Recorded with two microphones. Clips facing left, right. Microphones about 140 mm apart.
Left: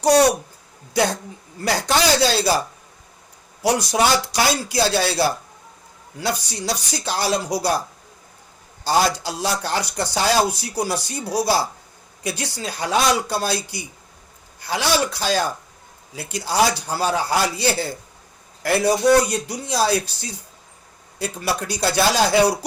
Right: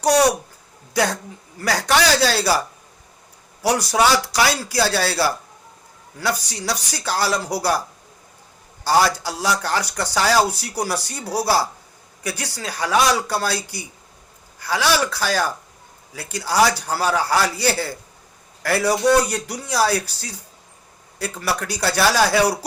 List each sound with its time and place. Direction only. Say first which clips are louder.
0.9 s speech: left 1 dB; 25° left (ahead or behind)